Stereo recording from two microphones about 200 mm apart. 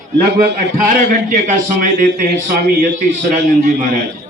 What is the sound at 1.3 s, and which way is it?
Speech, 40° right (ahead or behind).